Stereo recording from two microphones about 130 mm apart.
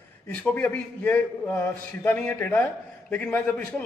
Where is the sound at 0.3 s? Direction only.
10° left (ahead or behind).